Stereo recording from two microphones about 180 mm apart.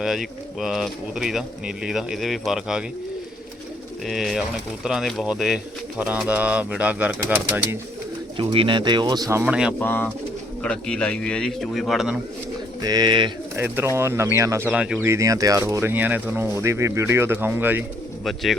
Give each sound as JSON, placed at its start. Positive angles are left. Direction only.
{"t": 0.0, "sound": "speech", "side_deg": 0}
{"t": 4.0, "sound": "speech", "side_deg": 0}
{"t": 8.4, "sound": "speech", "side_deg": -30}
{"t": 9.4, "sound": "speech", "side_deg": -5}
{"t": 9.7, "sound": "speech", "side_deg": 10}
{"t": 12.8, "sound": "speech", "side_deg": -20}
{"t": 13.6, "sound": "speech", "side_deg": -15}